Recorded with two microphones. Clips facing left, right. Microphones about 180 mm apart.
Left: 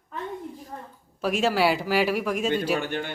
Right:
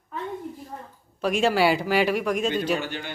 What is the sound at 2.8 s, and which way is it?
Speech, 55° left (ahead or behind).